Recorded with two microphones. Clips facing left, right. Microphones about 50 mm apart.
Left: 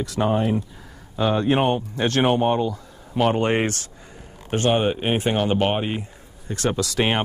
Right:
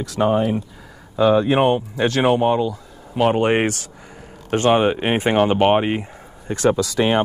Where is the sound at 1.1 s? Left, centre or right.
Right.